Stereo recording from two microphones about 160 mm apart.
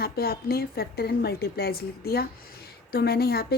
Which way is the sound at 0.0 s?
75° left (ahead or behind).